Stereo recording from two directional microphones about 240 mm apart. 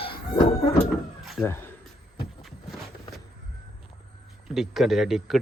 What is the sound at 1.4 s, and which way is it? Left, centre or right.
Speech, centre.